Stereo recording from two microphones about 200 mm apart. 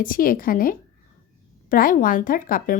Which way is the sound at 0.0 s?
45° left (ahead or behind).